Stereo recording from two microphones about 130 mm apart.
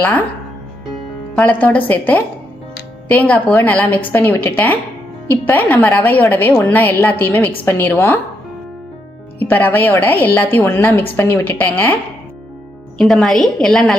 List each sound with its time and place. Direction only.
1.4 s a woman's voice: 10° left (ahead or behind)
9.4 s a woman's voice: 15° left (ahead or behind)
13.0 s a woman's voice: 5° left (ahead or behind)